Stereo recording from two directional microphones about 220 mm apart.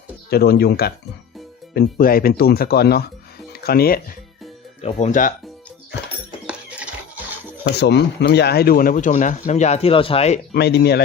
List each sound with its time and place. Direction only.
0.3 s speech: 45° left (ahead or behind)
4.8 s speech: 30° left (ahead or behind)
6.5 s horse: 5° right (ahead or behind)
7.6 s speech: 50° left (ahead or behind); by 10.4 s 30° left (ahead or behind)
10.5 s speech: 50° left (ahead or behind)